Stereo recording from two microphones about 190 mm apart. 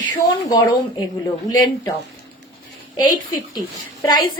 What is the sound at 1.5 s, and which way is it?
Speech, 20° left (ahead or behind).